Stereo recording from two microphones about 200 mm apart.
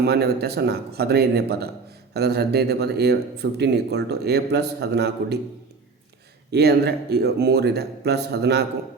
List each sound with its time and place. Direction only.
0.0 s a man's voice: 55° right (ahead or behind)
6.5 s speech: 55° right (ahead or behind)